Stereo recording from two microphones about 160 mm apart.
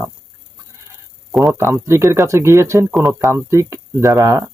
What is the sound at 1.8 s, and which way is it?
Speech, 15° right (ahead or behind).